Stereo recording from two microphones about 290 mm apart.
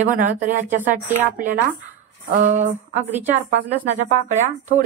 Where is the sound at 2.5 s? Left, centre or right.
Right.